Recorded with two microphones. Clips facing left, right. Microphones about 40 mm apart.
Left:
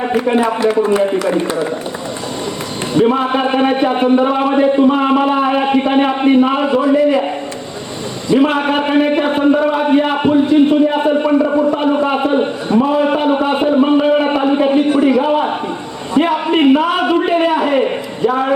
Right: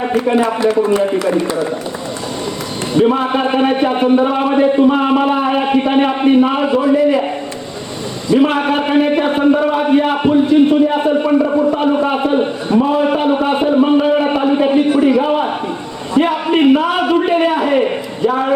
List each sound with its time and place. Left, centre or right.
0.0 s a sound: centre
0.8 s speech: left
2.9 s a man's voice: centre
8.4 s a man's voice: centre